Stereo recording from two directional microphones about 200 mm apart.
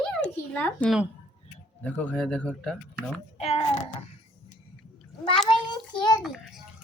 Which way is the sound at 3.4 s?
30° left (ahead or behind).